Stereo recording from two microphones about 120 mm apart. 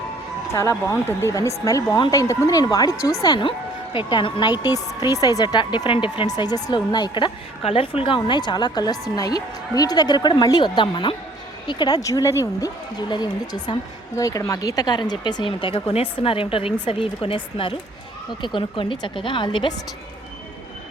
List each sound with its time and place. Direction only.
0.5 s speech: 25° left (ahead or behind)
3.9 s a woman's voice: 40° left (ahead or behind)
6.2 s a woman's voice: 35° left (ahead or behind)